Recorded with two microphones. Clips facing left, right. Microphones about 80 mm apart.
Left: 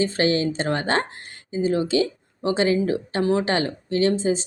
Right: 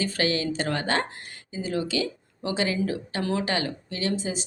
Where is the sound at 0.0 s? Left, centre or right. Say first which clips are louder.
Left 5 dB; left.